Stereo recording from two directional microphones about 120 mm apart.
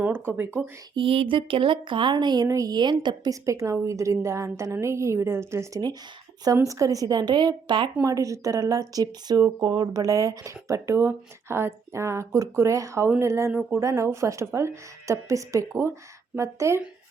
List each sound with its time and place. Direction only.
0.0 s speech: 15° right (ahead or behind)
0.9 s speech: 50° right (ahead or behind)
3.4 s speech: 25° right (ahead or behind)
8.0 s speech: 30° right (ahead or behind)